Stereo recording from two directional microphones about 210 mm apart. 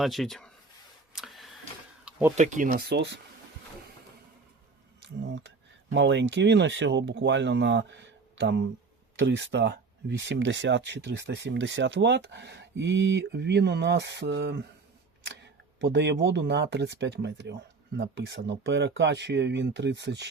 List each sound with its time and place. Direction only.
0.0 s speech: centre (ahead or behind)
1.1 s a sound: centre (ahead or behind)
2.3 s speech: 35° right (ahead or behind); by 3.2 s 55° right (ahead or behind)
5.0 s speech: 55° right (ahead or behind)
15.8 s speech: 55° right (ahead or behind)